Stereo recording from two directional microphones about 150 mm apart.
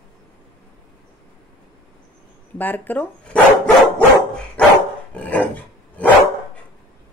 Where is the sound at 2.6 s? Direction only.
10° left (ahead or behind).